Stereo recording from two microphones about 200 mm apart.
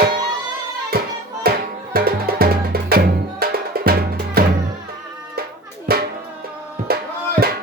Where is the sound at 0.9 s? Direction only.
50° right (ahead or behind).